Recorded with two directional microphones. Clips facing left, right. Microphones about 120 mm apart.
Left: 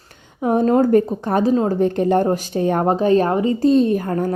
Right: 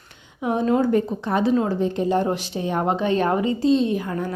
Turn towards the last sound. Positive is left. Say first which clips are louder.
# left 5 dB
turn(degrees=45)  # may be behind; listen again after turning